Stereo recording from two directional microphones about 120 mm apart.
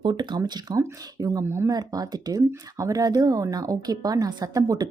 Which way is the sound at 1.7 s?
35° right (ahead or behind).